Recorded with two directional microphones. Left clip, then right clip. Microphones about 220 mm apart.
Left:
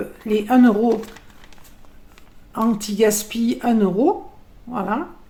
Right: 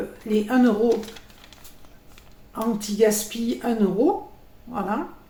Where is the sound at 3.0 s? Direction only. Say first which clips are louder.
Left 2 dB; 45° left (ahead or behind).